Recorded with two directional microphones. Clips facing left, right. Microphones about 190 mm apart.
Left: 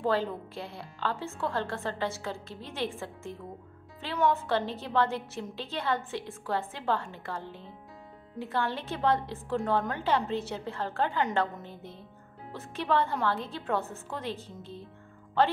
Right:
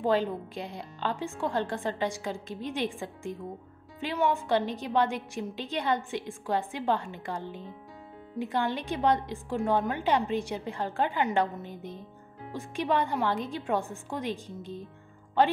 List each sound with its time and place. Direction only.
0.0 s a woman's voice: 15° right (ahead or behind)